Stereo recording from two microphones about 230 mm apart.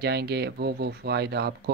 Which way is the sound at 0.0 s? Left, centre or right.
Right.